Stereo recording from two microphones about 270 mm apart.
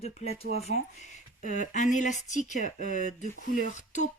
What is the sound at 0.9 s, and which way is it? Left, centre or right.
Speech, left.